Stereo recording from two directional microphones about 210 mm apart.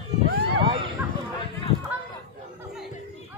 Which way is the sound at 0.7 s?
25° right (ahead or behind).